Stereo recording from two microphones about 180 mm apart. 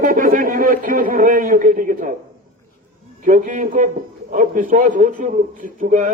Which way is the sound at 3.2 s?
45° right (ahead or behind).